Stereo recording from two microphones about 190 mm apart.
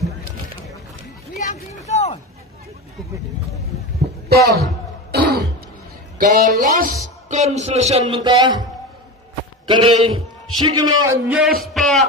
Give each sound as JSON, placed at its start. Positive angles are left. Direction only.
{"t": 1.5, "sound": "speech", "side_deg": 35}
{"t": 4.3, "sound": "a man's voice", "side_deg": -55}
{"t": 5.1, "sound": "throat clearing", "side_deg": -60}
{"t": 6.1, "sound": "speech", "side_deg": -45}
{"t": 9.7, "sound": "a man's voice", "side_deg": -25}
{"t": 11.2, "sound": "speech", "side_deg": -5}